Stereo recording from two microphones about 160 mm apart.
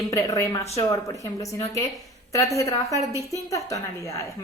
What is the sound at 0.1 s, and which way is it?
Speech, 20° left (ahead or behind).